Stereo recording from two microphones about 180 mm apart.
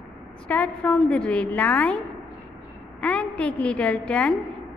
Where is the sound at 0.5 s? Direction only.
5° left (ahead or behind).